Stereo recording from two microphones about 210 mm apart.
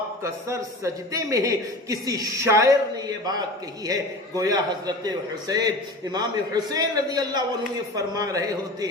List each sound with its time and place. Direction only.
0.2 s a man's voice: 15° right (ahead or behind)
3.8 s a man's voice: 15° right (ahead or behind)